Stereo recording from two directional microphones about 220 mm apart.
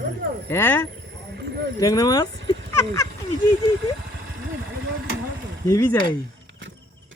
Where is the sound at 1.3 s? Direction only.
50° right (ahead or behind).